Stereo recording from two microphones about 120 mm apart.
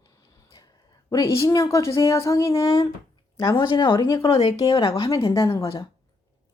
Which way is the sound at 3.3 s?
40° left (ahead or behind).